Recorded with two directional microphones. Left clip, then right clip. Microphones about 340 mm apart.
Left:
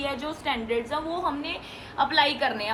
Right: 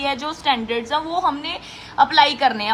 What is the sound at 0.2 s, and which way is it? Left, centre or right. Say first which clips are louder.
A woman's voice: right 8 dB; right.